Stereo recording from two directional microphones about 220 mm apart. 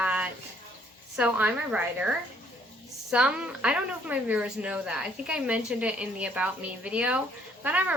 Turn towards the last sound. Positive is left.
turn(degrees=-5)  # may be behind; listen again after turning